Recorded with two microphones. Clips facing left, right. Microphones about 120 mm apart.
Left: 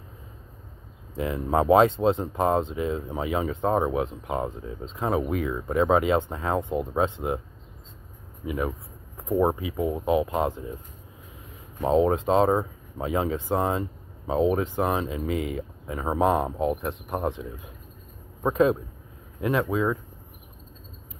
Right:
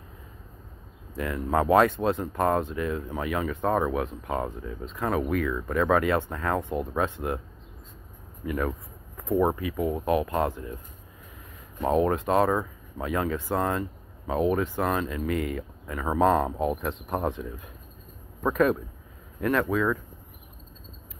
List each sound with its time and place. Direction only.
1.1 s speech: 20° left (ahead or behind)
8.5 s a sound: 15° left (ahead or behind)
9.4 s speech: 20° left (ahead or behind)
11.8 s speech: 20° left (ahead or behind)